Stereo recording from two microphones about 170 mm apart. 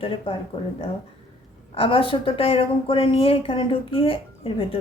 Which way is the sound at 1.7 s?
30° left (ahead or behind).